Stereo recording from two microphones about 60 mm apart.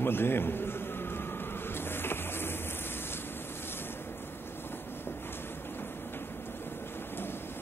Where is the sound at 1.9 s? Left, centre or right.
Left.